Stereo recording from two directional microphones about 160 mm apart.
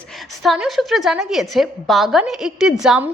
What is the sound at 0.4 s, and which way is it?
A woman's voice, centre (ahead or behind).